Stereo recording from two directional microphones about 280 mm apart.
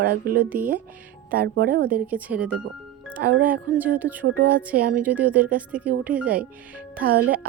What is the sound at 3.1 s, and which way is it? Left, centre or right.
Speech, right.